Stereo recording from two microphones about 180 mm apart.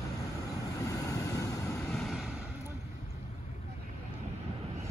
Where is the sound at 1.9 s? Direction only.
Centre (ahead or behind).